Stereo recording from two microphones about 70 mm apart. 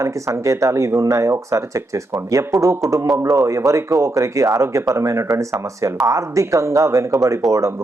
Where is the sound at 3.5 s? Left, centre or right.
Right.